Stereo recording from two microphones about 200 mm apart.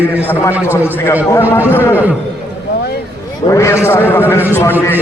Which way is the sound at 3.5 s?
15° left (ahead or behind).